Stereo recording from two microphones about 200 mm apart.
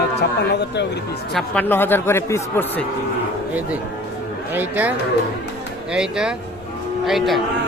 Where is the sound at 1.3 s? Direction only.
5° left (ahead or behind).